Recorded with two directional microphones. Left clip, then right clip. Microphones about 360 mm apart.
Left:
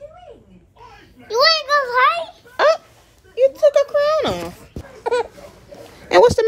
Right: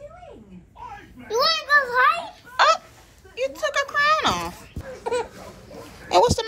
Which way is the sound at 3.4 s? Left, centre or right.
Centre.